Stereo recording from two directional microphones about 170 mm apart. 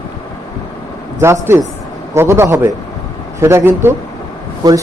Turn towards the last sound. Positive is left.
turn(degrees=-25)  # may be behind; listen again after turning